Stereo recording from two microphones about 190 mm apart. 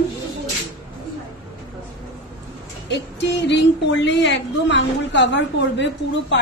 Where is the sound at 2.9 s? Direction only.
65° left (ahead or behind).